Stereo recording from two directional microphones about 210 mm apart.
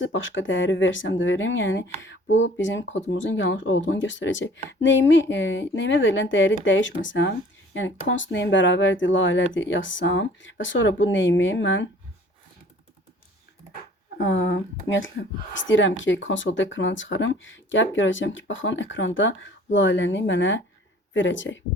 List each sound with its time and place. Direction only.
0.0 s speech: 65° left (ahead or behind)
14.2 s speech: 60° left (ahead or behind)